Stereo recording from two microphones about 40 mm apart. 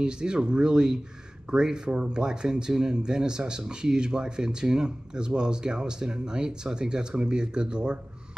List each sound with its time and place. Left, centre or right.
0.0 s speech: right